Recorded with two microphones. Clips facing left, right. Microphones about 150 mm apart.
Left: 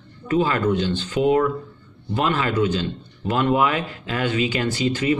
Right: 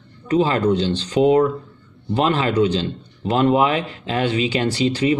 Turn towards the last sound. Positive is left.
turn(degrees=-35)  # may be behind; listen again after turning